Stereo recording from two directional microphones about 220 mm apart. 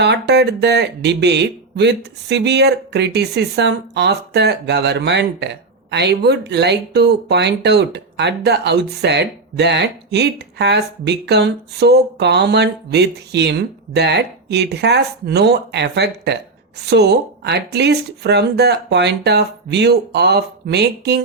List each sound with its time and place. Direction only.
0.0 s speech: 50° right (ahead or behind)